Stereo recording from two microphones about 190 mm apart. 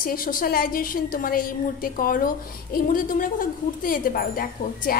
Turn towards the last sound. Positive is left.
turn(degrees=50)  # may be behind; listen again after turning